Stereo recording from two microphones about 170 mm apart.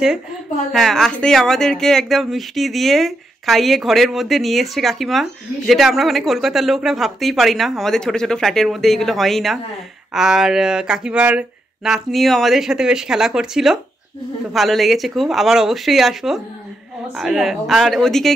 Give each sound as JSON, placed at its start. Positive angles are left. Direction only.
{"t": 0.7, "sound": "speech", "side_deg": 0}